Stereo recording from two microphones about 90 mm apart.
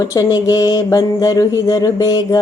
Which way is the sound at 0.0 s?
40° left (ahead or behind).